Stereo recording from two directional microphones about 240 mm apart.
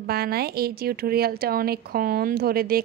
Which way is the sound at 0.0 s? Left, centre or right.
Right.